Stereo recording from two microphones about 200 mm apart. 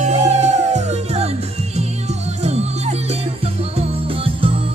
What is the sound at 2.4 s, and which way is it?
Music, 30° right (ahead or behind).